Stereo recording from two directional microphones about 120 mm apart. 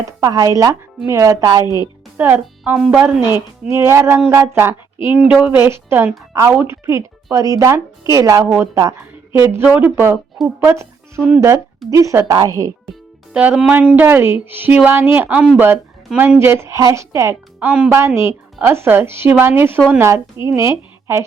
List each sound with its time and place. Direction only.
0.0 s speech: 30° right (ahead or behind)
2.1 s speech: 15° right (ahead or behind)
2.7 s speech: 5° right (ahead or behind)
3.1 s a woman's voice: 25° right (ahead or behind)
13.3 s a woman's voice: 10° right (ahead or behind)
17.6 s speech: 10° right (ahead or behind)
17.9 s a woman's voice: 20° right (ahead or behind)